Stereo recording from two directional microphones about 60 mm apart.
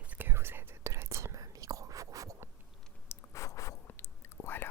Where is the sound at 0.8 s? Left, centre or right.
Right.